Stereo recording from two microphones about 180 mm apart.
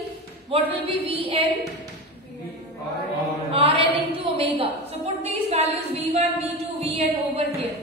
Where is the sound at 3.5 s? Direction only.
30° right (ahead or behind).